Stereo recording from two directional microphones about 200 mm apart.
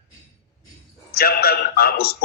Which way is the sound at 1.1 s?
50° left (ahead or behind).